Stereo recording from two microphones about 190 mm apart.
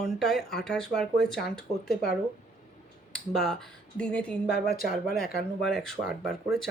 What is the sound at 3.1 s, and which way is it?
Speech, centre (ahead or behind).